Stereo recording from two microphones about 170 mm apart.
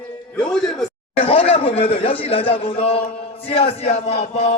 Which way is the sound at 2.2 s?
35° left (ahead or behind).